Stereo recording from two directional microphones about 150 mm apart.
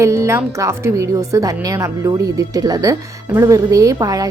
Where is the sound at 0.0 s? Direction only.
20° right (ahead or behind).